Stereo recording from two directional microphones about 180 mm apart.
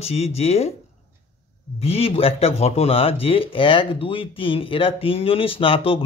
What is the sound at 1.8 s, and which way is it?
Speech, 35° left (ahead or behind).